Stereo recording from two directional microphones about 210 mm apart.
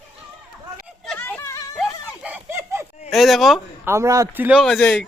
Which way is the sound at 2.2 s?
10° right (ahead or behind).